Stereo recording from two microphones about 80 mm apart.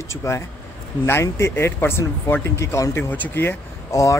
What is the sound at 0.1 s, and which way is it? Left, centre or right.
Speech, left.